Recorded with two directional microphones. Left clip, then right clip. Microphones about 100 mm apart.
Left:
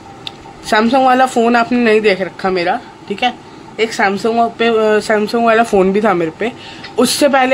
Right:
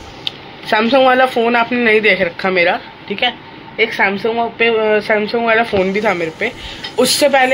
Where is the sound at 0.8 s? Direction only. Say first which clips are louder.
Even; 45° left (ahead or behind).